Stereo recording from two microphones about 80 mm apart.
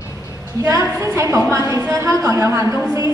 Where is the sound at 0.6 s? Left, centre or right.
Right.